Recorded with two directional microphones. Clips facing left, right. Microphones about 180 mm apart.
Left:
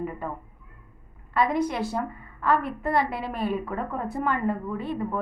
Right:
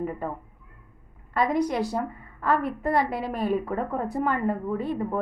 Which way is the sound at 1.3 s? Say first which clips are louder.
Even; 40° right (ahead or behind).